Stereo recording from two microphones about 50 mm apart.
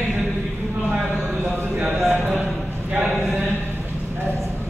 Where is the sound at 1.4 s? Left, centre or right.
Right.